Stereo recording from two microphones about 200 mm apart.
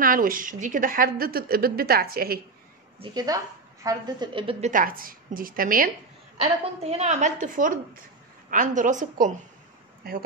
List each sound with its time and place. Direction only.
0.0 s a woman's voice: 45° right (ahead or behind)
3.0 s a woman's voice: 20° right (ahead or behind); by 5.9 s 45° right (ahead or behind)
6.3 s a woman's voice: 30° right (ahead or behind)